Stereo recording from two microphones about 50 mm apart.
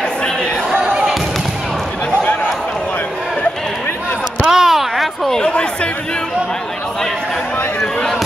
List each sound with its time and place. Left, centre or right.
0.8 s thump: centre
4.5 s a sound: centre
5.5 s chatter: left